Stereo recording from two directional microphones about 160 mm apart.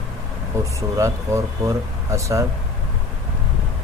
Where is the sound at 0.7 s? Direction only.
20° right (ahead or behind).